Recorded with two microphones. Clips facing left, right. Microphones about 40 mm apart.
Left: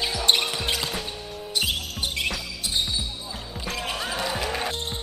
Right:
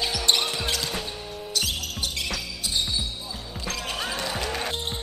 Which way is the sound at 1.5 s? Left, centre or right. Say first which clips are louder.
Left 2 dB; left.